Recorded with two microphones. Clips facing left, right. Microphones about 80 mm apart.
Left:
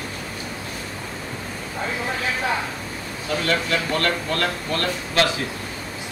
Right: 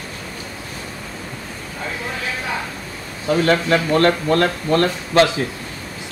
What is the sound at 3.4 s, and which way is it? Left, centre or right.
Speech, right.